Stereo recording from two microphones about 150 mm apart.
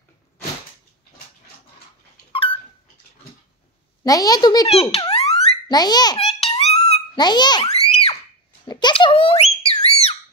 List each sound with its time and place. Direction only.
2.3 s dog: 35° left (ahead or behind)
4.0 s a woman's voice: 25° left (ahead or behind)
6.1 s babbling: 40° left (ahead or behind)
6.6 s a sound: 45° left (ahead or behind)
7.2 s a woman's voice: 30° left (ahead or behind)
7.6 s screaming: 45° left (ahead or behind)
8.6 s screaming: 30° left (ahead or behind)